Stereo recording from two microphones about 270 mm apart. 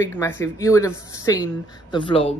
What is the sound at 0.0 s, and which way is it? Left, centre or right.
Speech, centre.